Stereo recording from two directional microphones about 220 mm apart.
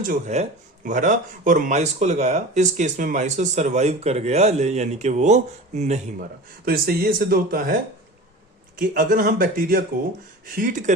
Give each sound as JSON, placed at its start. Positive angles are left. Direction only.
{"t": 0.0, "sound": "speech", "side_deg": -35}
{"t": 6.7, "sound": "speech", "side_deg": -40}
{"t": 8.8, "sound": "speech", "side_deg": -40}